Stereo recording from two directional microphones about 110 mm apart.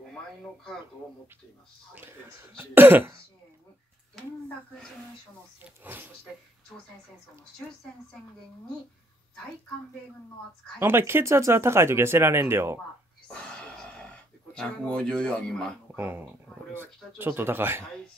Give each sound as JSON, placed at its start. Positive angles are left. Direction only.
{"t": 2.2, "sound": "speech", "side_deg": -20}
{"t": 6.7, "sound": "speech", "side_deg": 0}
{"t": 10.8, "sound": "speech", "side_deg": -20}
{"t": 13.3, "sound": "a sound", "side_deg": 10}
{"t": 14.5, "sound": "a man's voice", "side_deg": 5}
{"t": 16.0, "sound": "speech", "side_deg": -20}